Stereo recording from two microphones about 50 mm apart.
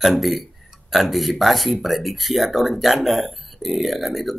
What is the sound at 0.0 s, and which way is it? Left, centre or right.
Speech, centre.